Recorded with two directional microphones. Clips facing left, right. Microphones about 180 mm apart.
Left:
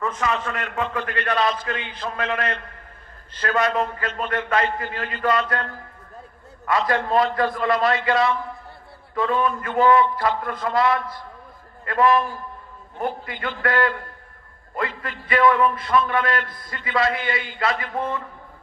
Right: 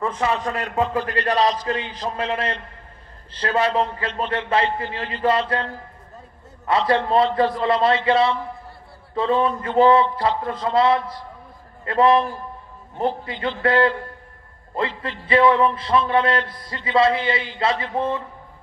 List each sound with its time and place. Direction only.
0.0 s a man's voice: 30° right (ahead or behind)